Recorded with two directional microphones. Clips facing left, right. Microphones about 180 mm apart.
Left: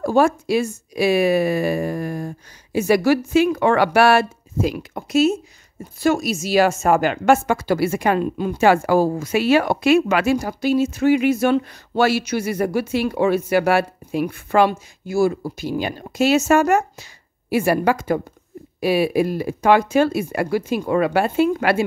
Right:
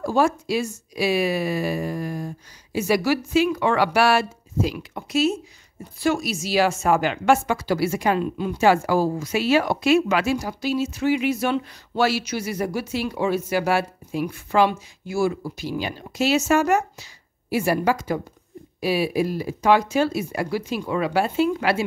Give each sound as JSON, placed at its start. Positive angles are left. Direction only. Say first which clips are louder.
{"t": 0.0, "sound": "a woman's voice", "louder": "left 4 dB", "side_deg": 55}